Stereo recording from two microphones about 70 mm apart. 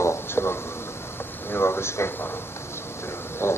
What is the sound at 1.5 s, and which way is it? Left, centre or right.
Speech, left.